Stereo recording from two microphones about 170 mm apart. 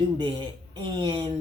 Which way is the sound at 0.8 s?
25° right (ahead or behind).